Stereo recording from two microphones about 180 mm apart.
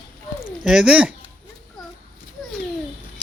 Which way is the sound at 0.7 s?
5° right (ahead or behind).